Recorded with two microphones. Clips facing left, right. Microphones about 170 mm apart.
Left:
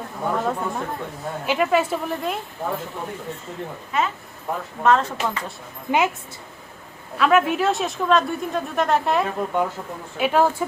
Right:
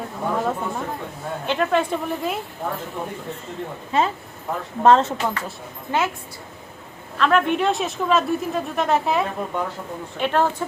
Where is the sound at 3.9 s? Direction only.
30° right (ahead or behind).